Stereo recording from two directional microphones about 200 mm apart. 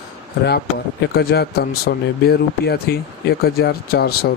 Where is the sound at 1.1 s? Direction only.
55° left (ahead or behind).